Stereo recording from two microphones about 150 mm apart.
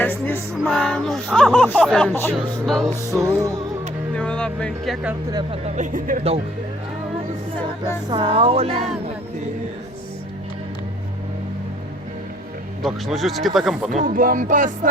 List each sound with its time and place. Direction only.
0.0 s music: 15° left (ahead or behind)
0.6 s speech: 5° left (ahead or behind)
2.9 s music: 20° right (ahead or behind)
4.1 s speech: 5° left (ahead or behind)
5.3 s music: 30° right (ahead or behind)
5.6 s music: 55° right (ahead or behind)
8.1 s speech: 35° right (ahead or behind)
12.8 s speech: centre (ahead or behind)
13.9 s music: 60° right (ahead or behind)